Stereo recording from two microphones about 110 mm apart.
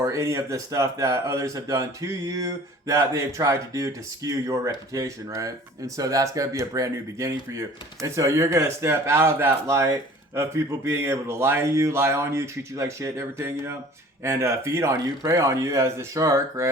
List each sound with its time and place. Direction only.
0.0 s speech: 30° right (ahead or behind)